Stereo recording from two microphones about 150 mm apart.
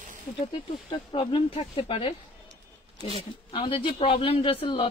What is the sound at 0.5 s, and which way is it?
Speech, 35° left (ahead or behind).